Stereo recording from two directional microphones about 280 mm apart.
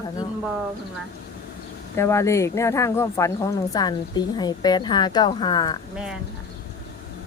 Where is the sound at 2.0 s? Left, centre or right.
Centre.